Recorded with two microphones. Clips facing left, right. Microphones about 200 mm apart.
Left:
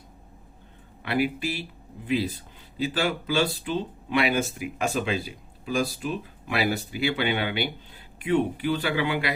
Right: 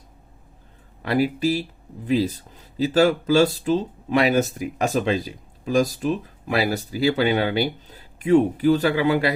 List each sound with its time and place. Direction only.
1.0 s speech: 40° right (ahead or behind)